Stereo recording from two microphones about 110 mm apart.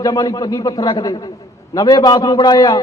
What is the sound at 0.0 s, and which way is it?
A man's voice, 35° left (ahead or behind).